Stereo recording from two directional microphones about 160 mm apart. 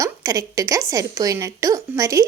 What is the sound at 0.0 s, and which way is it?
A woman's voice, 20° right (ahead or behind).